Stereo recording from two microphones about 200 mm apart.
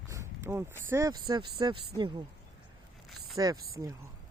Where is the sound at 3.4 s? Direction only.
15° right (ahead or behind).